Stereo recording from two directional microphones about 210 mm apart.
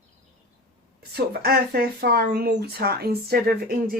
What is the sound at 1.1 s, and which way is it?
A woman's voice, 50° right (ahead or behind).